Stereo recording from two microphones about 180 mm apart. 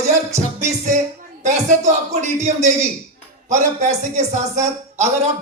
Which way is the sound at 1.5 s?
40° right (ahead or behind).